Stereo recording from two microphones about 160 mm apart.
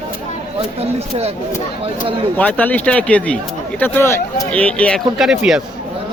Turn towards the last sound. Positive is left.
turn(degrees=-5)  # may be behind; listen again after turning